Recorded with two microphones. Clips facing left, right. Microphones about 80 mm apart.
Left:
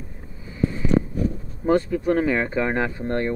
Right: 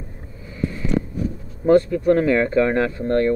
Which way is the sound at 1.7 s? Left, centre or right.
Centre.